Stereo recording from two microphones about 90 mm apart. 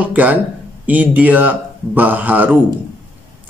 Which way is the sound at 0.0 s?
15° right (ahead or behind).